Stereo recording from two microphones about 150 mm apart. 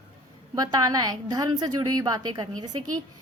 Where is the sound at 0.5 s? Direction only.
25° right (ahead or behind).